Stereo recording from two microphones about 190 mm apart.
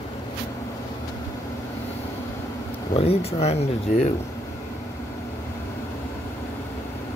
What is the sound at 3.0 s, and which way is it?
Speech, 35° left (ahead or behind).